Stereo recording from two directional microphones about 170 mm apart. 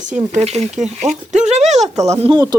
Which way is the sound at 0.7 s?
Centre (ahead or behind).